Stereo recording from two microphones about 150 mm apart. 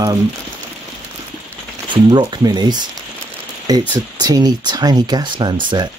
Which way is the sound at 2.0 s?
30° right (ahead or behind).